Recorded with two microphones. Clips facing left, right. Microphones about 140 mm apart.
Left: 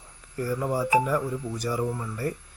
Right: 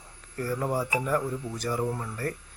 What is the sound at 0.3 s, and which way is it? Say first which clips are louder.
Speech: left 2 dB; 10° left (ahead or behind).